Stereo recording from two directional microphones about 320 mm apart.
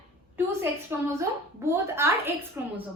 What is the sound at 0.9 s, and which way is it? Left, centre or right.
Speech, centre.